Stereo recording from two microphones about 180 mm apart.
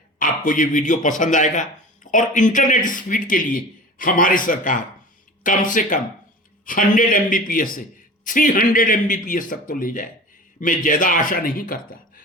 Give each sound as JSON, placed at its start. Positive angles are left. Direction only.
{"t": 0.2, "sound": "speech", "side_deg": 45}